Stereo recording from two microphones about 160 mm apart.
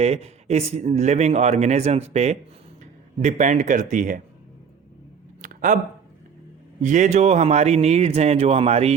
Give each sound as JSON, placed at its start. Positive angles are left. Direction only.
{"t": 0.0, "sound": "speech", "side_deg": -40}
{"t": 5.4, "sound": "a sound", "side_deg": -55}
{"t": 6.8, "sound": "speech", "side_deg": -50}